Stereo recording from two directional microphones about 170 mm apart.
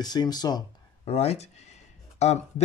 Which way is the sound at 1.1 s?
35° left (ahead or behind).